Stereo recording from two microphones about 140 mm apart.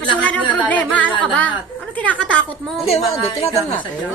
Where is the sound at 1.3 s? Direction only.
10° left (ahead or behind).